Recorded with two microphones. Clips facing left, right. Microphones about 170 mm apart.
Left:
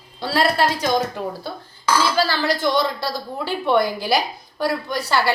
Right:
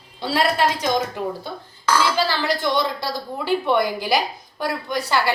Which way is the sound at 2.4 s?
20° right (ahead or behind).